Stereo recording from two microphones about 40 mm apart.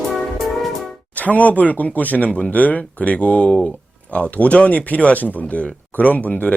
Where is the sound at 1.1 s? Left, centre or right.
Left.